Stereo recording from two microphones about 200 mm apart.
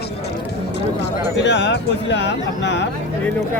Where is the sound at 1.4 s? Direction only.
65° left (ahead or behind).